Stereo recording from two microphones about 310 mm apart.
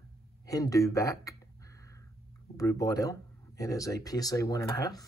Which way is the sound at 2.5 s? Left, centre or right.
Centre.